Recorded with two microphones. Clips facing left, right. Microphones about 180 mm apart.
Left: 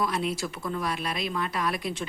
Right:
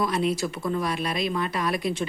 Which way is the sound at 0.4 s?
15° right (ahead or behind).